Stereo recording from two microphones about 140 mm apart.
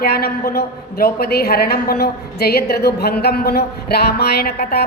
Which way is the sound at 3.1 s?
90° left.